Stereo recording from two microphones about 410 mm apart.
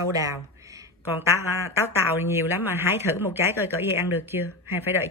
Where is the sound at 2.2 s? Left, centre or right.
Centre.